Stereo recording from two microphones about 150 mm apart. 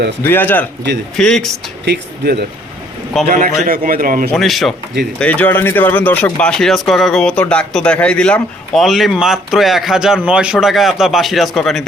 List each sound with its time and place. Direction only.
0.2 s a man's voice: 15° left (ahead or behind)
1.8 s speech: 90° right
3.2 s a man's voice: 65° right (ahead or behind)
4.4 s speech: centre (ahead or behind)